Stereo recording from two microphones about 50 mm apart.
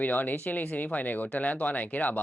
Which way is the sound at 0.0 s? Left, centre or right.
Left.